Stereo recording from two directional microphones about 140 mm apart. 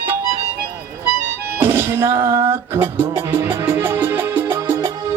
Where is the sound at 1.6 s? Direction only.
15° right (ahead or behind).